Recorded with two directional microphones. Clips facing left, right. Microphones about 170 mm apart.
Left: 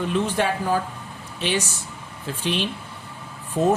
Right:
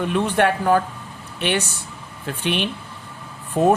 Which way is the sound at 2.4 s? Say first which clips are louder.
Right 2 dB; 60° right (ahead or behind).